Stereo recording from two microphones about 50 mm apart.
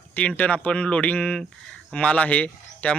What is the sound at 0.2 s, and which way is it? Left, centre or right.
A man's voice, left.